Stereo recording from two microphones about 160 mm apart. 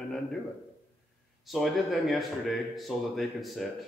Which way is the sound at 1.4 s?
Centre (ahead or behind).